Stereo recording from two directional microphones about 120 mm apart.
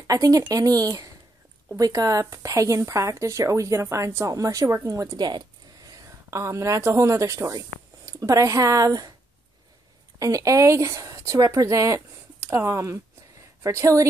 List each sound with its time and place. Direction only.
0.0 s speech: 30° right (ahead or behind)
10.1 s speech: 30° right (ahead or behind)